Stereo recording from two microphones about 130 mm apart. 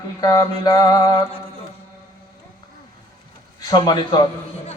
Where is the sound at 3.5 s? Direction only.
30° left (ahead or behind).